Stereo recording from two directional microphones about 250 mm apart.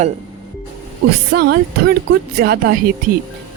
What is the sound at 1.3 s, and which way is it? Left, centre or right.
A woman's voice, right.